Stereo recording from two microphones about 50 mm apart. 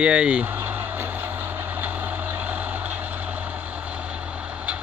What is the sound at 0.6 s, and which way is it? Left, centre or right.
Vehicle, right.